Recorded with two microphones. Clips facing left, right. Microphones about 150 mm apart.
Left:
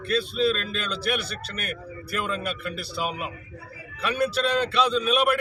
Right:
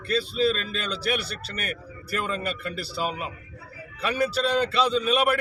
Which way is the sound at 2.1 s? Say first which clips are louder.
Even; 5° left (ahead or behind).